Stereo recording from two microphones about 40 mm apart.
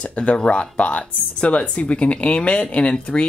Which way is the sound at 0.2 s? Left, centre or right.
Left.